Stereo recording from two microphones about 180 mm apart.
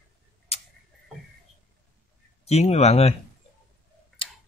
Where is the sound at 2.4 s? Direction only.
35° left (ahead or behind).